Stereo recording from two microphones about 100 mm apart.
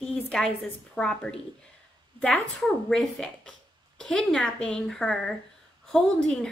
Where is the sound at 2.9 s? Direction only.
5° left (ahead or behind).